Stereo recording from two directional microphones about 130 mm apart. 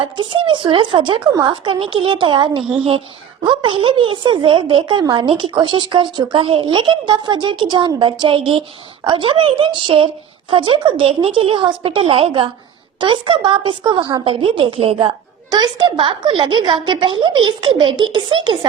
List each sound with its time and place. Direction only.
0.0 s a woman's voice: 40° right (ahead or behind)